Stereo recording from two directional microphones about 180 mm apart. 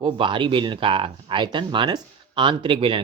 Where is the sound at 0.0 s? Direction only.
25° right (ahead or behind).